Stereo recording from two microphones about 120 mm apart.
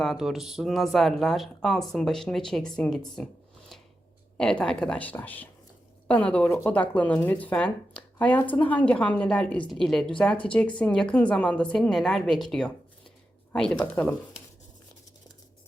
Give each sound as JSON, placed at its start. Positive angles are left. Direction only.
{"t": 0.0, "sound": "speech", "side_deg": 0}
{"t": 4.4, "sound": "speech", "side_deg": 5}